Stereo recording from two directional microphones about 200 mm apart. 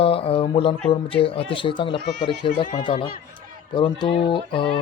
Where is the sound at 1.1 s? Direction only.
25° left (ahead or behind).